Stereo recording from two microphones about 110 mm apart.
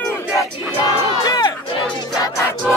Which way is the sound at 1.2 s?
40° left (ahead or behind).